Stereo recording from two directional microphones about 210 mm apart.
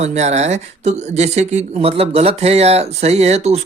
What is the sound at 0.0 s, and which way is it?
Speech, 30° right (ahead or behind).